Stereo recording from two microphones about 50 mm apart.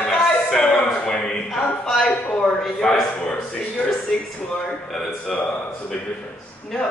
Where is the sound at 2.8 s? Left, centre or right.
Centre.